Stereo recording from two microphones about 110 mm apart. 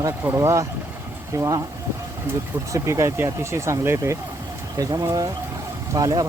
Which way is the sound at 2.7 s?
30° right (ahead or behind).